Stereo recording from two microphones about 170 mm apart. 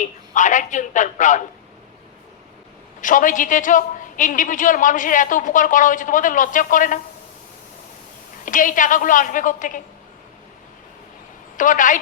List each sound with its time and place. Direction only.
0.0 s a woman's voice: 45° left (ahead or behind)
3.0 s a woman's voice: 50° left (ahead or behind)
8.4 s a woman's voice: 50° left (ahead or behind)
11.5 s a woman's voice: 50° left (ahead or behind)